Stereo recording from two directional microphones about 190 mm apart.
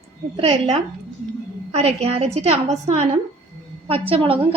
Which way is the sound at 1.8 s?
35° right (ahead or behind).